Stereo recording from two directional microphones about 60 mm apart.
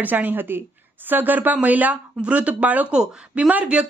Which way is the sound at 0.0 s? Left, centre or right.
Right.